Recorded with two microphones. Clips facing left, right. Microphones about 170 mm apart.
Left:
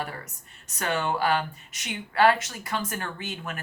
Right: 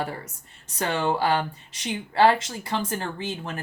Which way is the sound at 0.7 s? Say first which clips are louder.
Right 3 dB; 30° right (ahead or behind).